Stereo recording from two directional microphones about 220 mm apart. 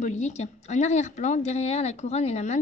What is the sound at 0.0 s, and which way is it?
A woman's voice, 30° left (ahead or behind).